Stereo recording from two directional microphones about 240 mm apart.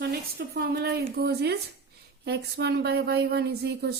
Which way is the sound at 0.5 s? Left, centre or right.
Right.